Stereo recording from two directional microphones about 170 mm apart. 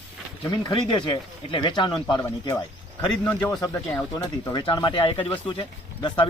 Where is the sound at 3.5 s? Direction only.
20° left (ahead or behind).